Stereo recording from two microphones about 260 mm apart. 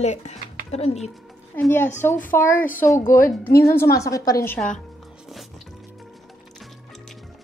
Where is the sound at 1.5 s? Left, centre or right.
Centre.